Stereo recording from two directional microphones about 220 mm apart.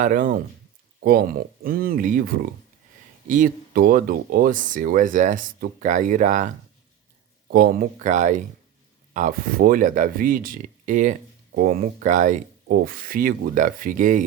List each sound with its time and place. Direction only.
0.0 s speech: 35° right (ahead or behind)
7.5 s speech: 45° right (ahead or behind)